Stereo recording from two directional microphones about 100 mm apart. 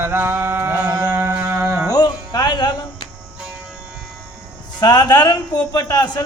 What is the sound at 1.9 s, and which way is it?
Music, 40° left (ahead or behind).